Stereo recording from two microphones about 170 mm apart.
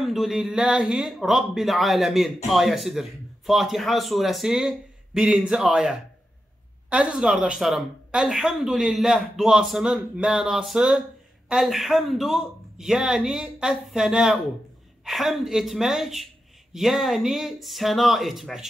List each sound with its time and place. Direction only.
0.0 s speech: centre (ahead or behind)